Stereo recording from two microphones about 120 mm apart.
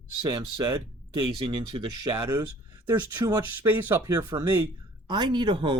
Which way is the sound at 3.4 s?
15° right (ahead or behind).